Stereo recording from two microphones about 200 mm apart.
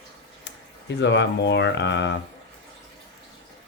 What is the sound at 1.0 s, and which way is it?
Speech, 60° left (ahead or behind).